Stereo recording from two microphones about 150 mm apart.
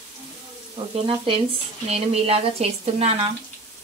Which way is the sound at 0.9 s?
35° right (ahead or behind).